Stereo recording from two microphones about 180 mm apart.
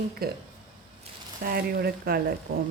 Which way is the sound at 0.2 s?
55° right (ahead or behind).